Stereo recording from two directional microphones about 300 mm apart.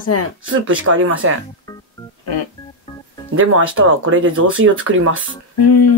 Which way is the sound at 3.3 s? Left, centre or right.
Right.